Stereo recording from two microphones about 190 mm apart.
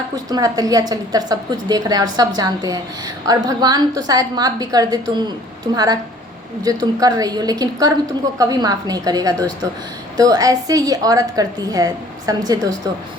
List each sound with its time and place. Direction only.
0.3 s a woman's voice: 20° right (ahead or behind)